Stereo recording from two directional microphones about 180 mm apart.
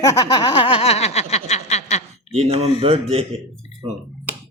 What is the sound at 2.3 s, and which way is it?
Speech, 35° right (ahead or behind).